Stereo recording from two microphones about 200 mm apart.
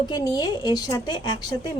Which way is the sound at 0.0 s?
20° left (ahead or behind).